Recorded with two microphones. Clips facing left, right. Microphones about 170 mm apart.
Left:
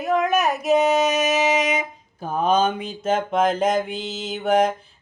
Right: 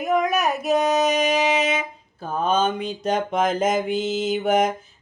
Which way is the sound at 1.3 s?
10° left (ahead or behind).